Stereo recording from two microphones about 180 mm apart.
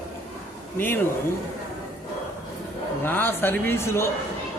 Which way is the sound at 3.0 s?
10° left (ahead or behind).